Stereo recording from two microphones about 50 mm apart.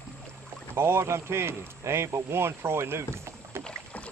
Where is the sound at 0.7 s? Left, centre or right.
Right.